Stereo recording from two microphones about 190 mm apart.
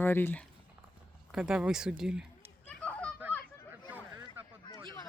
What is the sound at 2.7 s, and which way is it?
Honk, 5° left (ahead or behind).